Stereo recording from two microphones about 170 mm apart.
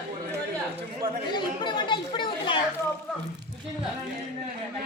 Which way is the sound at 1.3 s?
25° left (ahead or behind).